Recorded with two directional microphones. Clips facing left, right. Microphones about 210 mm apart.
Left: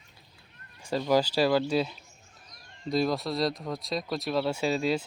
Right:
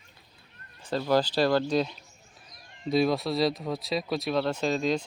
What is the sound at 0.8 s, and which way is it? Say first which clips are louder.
Speech: even; 10° left (ahead or behind).